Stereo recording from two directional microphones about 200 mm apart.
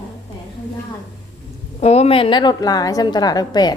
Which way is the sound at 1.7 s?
30° left (ahead or behind).